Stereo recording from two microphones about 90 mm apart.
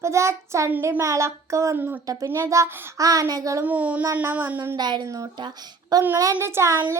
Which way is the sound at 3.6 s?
15° right (ahead or behind).